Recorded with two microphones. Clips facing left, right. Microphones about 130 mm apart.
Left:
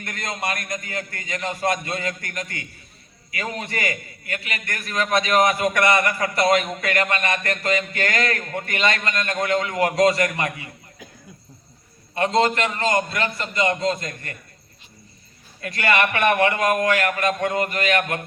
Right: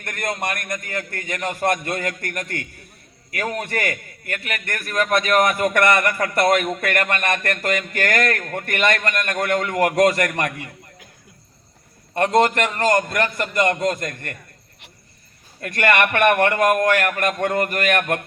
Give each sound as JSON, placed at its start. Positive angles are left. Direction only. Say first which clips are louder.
{"t": 0.0, "sound": "a man's voice", "louder": "right 3 dB", "side_deg": -55}
{"t": 12.1, "sound": "a man's voice", "louder": "right 3 dB", "side_deg": -55}
{"t": 15.6, "sound": "a man's voice", "louder": "right 2 dB", "side_deg": -55}